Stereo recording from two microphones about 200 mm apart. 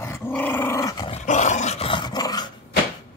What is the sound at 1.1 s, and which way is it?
Dog, 35° left (ahead or behind).